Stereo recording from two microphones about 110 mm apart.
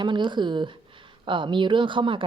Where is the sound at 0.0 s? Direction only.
45° right (ahead or behind).